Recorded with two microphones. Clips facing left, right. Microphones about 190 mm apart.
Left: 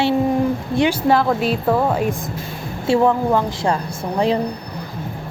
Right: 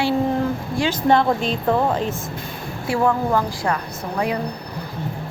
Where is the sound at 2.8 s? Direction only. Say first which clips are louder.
Left 4 dB; 20° left (ahead or behind).